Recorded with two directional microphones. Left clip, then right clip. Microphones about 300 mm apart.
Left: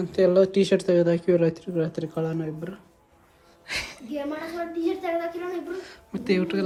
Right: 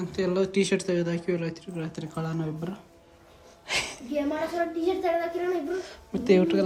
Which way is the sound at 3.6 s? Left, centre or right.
Centre.